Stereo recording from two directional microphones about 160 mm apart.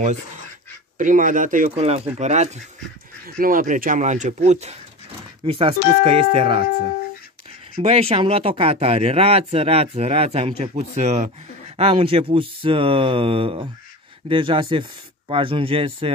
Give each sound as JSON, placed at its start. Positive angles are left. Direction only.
{"t": 0.9, "sound": "speech", "side_deg": -55}
{"t": 2.1, "sound": "speech", "side_deg": -45}
{"t": 3.3, "sound": "speech", "side_deg": -65}
{"t": 7.8, "sound": "speech", "side_deg": -40}